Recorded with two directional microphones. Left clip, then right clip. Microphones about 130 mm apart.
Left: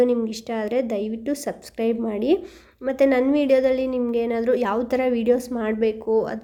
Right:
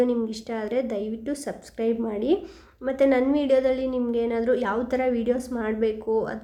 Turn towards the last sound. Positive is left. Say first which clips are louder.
# left 3 dB
turn(degrees=25)  # may be behind; listen again after turning